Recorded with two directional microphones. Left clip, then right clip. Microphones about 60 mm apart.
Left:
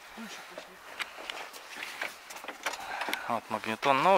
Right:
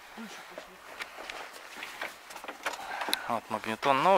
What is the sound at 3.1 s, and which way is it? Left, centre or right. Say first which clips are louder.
Speech: right 1 dB; centre.